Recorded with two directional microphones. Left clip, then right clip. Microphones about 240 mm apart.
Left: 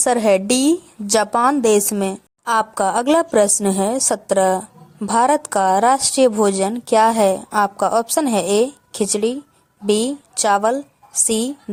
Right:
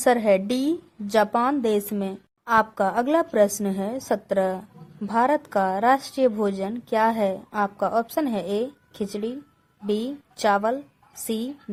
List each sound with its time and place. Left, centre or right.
0.0 s a woman's voice: centre